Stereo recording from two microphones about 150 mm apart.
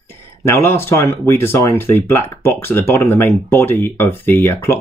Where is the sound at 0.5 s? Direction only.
15° left (ahead or behind).